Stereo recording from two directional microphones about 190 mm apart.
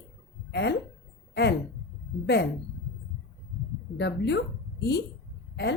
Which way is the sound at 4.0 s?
60° left (ahead or behind).